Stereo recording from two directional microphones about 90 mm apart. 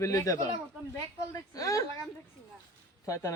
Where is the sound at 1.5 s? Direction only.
40° left (ahead or behind).